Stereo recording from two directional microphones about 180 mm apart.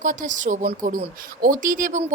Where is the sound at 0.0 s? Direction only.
45° right (ahead or behind).